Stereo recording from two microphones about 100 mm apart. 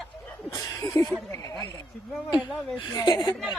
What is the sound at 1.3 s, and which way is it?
Speech, 35° left (ahead or behind).